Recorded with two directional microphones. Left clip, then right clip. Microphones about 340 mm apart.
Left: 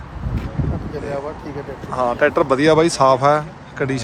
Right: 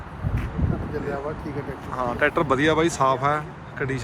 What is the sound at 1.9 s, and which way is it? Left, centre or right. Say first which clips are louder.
Speech: left 6 dB; centre.